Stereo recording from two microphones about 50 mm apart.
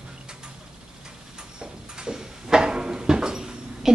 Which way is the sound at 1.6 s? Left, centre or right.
Centre.